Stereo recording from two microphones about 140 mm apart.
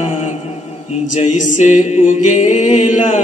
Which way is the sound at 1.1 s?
65° left (ahead or behind).